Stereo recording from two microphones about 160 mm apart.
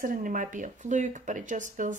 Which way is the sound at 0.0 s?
60° right (ahead or behind).